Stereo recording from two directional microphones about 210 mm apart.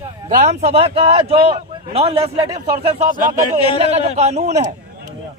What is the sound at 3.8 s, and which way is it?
Speech, 30° right (ahead or behind).